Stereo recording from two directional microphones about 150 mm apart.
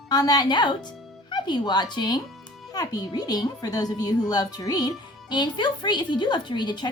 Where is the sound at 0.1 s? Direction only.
25° left (ahead or behind).